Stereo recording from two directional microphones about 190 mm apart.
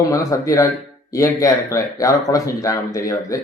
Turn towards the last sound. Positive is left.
turn(degrees=15)  # may be behind; listen again after turning